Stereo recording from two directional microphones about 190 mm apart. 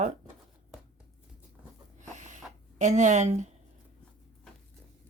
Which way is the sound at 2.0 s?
40° right (ahead or behind).